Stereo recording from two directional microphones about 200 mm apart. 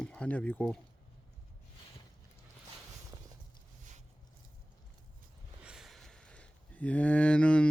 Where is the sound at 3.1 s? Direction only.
20° right (ahead or behind).